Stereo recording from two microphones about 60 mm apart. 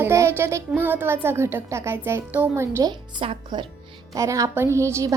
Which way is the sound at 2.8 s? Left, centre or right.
Right.